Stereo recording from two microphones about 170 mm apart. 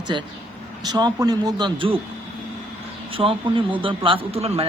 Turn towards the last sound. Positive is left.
turn(degrees=-35)  # may be behind; listen again after turning